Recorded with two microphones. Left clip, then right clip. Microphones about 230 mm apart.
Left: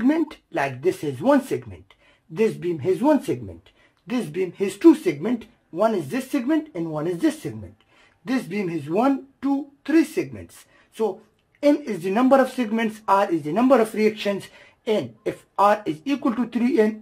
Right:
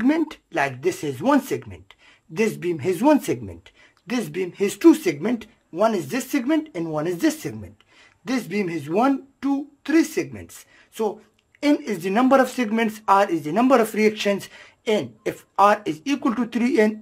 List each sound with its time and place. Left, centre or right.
0.0 s speech: centre
11.6 s speech: centre